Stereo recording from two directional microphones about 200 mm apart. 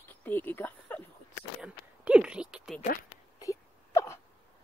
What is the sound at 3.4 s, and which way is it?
Wail, 15° left (ahead or behind).